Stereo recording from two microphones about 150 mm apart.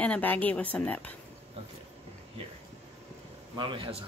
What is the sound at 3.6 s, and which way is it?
Speech, 35° right (ahead or behind).